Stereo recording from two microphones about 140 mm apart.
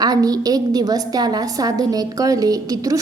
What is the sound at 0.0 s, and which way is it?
A woman's voice, 30° right (ahead or behind).